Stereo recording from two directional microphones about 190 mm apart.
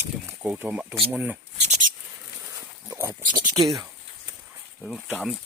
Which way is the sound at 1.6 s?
35° right (ahead or behind).